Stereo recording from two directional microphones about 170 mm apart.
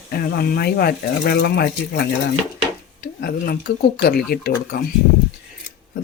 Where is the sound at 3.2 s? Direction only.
65° left (ahead or behind).